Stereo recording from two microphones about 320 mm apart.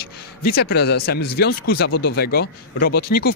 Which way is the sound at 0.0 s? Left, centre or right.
Left.